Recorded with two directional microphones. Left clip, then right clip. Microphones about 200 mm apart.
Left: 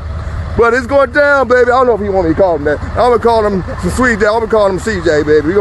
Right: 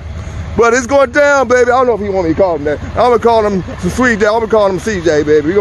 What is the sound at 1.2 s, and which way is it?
Speech, 5° right (ahead or behind).